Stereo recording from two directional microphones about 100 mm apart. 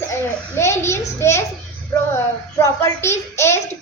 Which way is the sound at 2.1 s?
30° left (ahead or behind).